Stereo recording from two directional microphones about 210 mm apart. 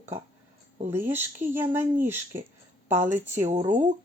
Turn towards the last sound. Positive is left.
turn(degrees=-35)  # may be behind; listen again after turning